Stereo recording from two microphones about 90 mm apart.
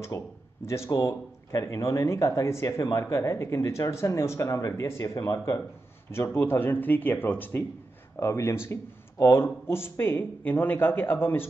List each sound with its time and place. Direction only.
0.1 s speech: 30° left (ahead or behind)
6.1 s speech: 25° left (ahead or behind)
8.2 s speech: 35° left (ahead or behind)